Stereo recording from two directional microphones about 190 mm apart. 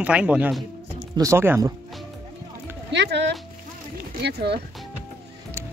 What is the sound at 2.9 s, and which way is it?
A woman's voice, 65° right (ahead or behind).